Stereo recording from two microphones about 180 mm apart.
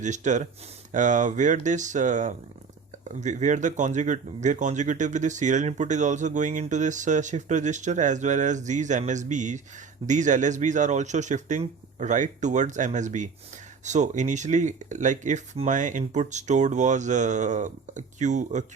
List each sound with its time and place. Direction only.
0.0 s speech: 40° right (ahead or behind)